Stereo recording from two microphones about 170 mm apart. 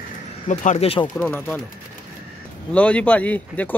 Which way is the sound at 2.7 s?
10° left (ahead or behind).